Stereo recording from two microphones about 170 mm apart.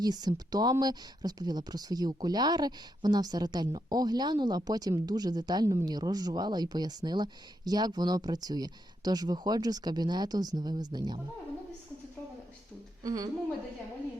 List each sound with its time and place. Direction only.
0.0 s speech: 25° right (ahead or behind)
13.0 s a woman's voice: 20° right (ahead or behind)